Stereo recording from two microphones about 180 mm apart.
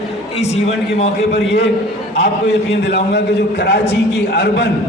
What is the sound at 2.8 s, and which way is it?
A man's voice, 65° left (ahead or behind).